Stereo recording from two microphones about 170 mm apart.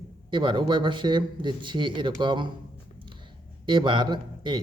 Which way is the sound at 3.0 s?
30° right (ahead or behind).